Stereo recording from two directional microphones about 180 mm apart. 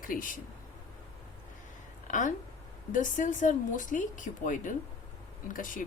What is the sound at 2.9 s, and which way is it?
A woman's voice, 45° left (ahead or behind).